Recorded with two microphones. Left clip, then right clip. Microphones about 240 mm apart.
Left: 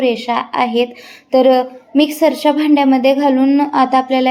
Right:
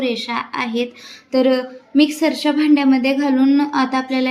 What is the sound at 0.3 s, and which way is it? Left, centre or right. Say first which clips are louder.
Speech: left 7 dB; left.